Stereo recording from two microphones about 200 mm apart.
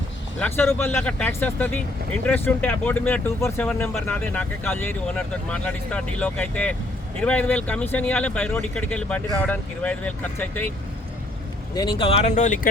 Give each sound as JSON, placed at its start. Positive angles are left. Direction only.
{"t": 0.3, "sound": "speech", "side_deg": 10}
{"t": 11.7, "sound": "speech", "side_deg": 20}